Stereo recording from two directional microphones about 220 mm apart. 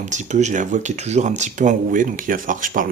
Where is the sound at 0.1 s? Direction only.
35° right (ahead or behind).